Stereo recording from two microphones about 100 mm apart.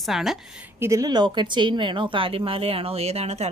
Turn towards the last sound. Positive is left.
turn(degrees=-90)